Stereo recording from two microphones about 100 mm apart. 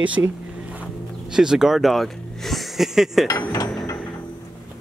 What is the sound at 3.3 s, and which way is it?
Mechanisms, 40° left (ahead or behind).